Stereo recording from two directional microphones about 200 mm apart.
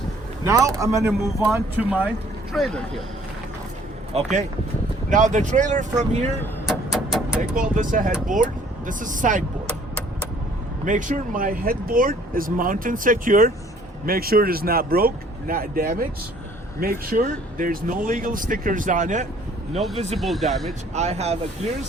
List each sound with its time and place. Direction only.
0.4 s speech: 15° right (ahead or behind); by 3.0 s centre (ahead or behind)
4.1 s speech: 35° right (ahead or behind)
6.7 s a sound: centre (ahead or behind)
7.5 s speech: 40° right (ahead or behind)
10.8 s speech: 40° right (ahead or behind)
20.1 s speech: centre (ahead or behind)
20.9 s speech: 35° right (ahead or behind)